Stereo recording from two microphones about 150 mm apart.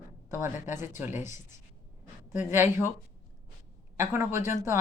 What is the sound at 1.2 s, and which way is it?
Speech, 55° left (ahead or behind).